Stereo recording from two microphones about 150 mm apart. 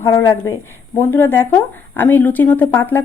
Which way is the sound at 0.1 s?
25° left (ahead or behind).